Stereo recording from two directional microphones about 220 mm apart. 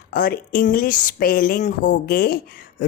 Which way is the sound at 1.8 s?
50° left (ahead or behind).